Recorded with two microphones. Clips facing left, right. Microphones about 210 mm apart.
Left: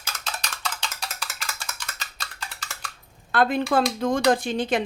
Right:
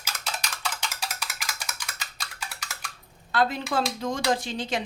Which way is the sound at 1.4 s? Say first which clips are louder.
Left 1 dB; 15° right (ahead or behind).